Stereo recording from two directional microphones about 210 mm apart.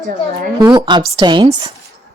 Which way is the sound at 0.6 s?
20° right (ahead or behind).